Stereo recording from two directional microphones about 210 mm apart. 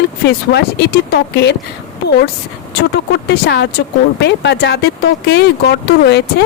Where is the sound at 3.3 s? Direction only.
55° left (ahead or behind).